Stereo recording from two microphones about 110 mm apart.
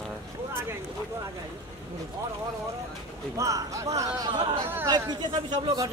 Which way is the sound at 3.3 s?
30° right (ahead or behind).